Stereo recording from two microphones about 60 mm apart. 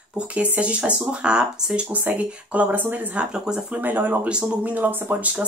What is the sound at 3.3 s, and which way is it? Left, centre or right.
Speech, centre.